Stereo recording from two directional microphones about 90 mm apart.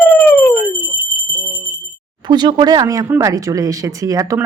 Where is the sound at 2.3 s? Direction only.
55° right (ahead or behind).